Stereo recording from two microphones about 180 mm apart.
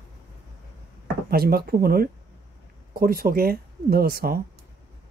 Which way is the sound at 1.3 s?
60° right (ahead or behind).